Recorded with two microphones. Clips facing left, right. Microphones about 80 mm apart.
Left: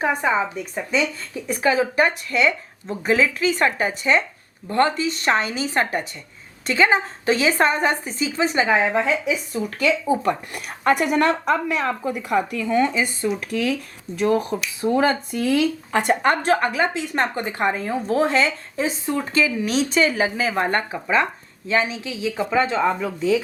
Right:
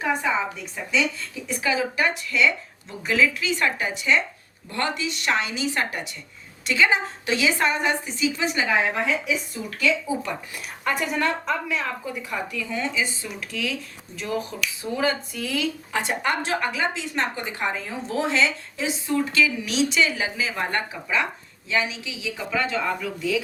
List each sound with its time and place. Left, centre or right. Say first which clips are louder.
0.0 s speech: left 3 dB; left
9.5 s speech: left 4 dB; left